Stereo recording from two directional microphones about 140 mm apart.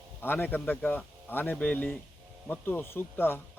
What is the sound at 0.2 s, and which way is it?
A man's voice, 15° left (ahead or behind).